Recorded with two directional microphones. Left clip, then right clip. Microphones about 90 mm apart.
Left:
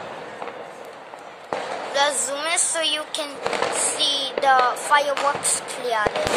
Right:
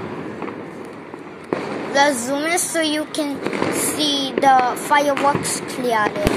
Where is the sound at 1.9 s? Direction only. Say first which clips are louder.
Right 5 dB; 15° right (ahead or behind).